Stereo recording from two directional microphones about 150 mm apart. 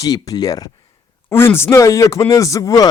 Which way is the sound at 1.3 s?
15° left (ahead or behind).